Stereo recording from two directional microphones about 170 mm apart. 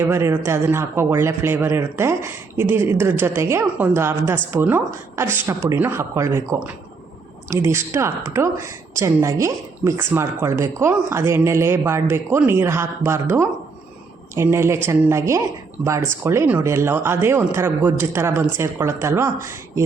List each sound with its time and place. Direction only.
0.0 s a man's voice: 15° right (ahead or behind)